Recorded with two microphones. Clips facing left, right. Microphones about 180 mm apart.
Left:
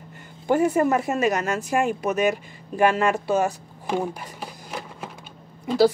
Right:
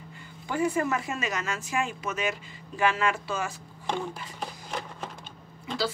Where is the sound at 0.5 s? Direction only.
55° left (ahead or behind).